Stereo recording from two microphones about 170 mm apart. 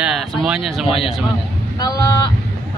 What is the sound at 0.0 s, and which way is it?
Speech, 5° right (ahead or behind).